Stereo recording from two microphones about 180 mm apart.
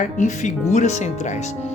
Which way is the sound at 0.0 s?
45° left (ahead or behind).